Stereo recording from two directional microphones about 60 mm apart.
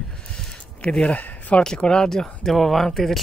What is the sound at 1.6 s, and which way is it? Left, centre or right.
Speech, centre.